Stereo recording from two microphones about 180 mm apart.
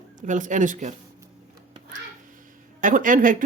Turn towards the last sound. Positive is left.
turn(degrees=-50)  # may be behind; listen again after turning